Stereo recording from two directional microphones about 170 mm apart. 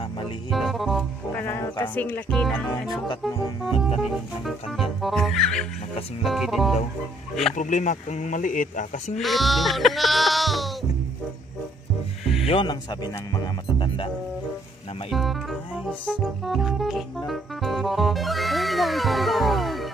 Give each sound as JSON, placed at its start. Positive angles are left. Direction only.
{"t": 0.5, "sound": "music", "side_deg": 0}
{"t": 1.3, "sound": "speech", "side_deg": 15}
{"t": 4.0, "sound": "speech", "side_deg": 0}
{"t": 7.5, "sound": "speech", "side_deg": 45}
{"t": 9.2, "sound": "speech", "side_deg": 0}
{"t": 12.4, "sound": "speech", "side_deg": 30}
{"t": 15.0, "sound": "speech", "side_deg": 0}
{"t": 17.3, "sound": "music", "side_deg": 0}